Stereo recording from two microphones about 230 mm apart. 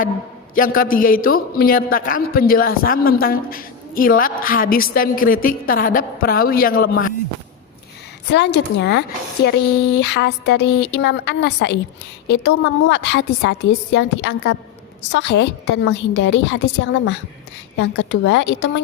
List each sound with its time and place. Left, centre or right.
0.8 s a man's voice: left
8.3 s speech: left